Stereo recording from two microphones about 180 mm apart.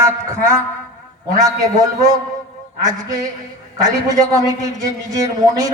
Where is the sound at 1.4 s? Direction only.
20° right (ahead or behind).